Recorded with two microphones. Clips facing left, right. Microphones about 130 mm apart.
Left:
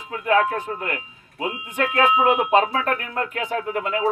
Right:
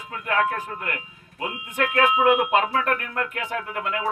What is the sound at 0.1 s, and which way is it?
A man's voice, 25° left (ahead or behind).